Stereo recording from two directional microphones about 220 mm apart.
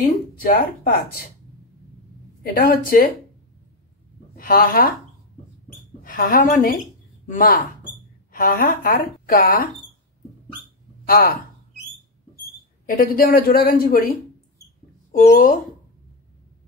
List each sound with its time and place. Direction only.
0.4 s speech: 40° left (ahead or behind)
2.4 s speech: 40° left (ahead or behind)
4.4 s speech: 40° left (ahead or behind)
6.0 s speech: 40° left (ahead or behind)
11.1 s speech: 40° left (ahead or behind)
12.8 s speech: 40° left (ahead or behind)
15.1 s speech: 40° left (ahead or behind)